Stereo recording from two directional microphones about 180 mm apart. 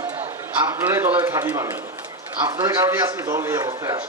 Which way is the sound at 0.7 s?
15° right (ahead or behind).